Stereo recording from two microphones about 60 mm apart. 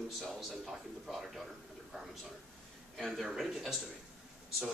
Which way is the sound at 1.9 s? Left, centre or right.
Centre.